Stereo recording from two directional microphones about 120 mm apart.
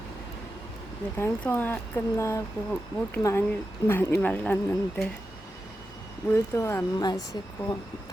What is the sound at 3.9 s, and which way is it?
Speech, 20° left (ahead or behind).